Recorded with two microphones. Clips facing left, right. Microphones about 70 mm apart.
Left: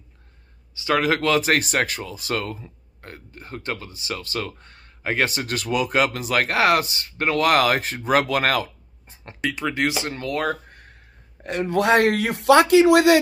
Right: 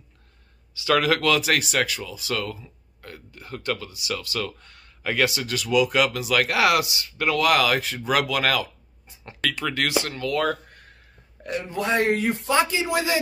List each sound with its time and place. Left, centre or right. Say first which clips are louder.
0.7 s speech: even; left
9.4 s speech: left 2 dB; centre
10.1 s speech: right 1 dB; left
11.4 s a man's voice: left 6 dB; left